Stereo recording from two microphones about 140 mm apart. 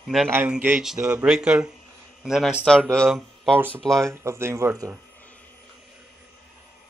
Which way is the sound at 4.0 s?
20° right (ahead or behind).